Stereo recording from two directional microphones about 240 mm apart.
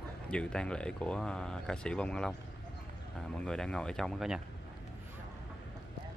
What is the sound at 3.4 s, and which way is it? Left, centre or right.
Speech, centre.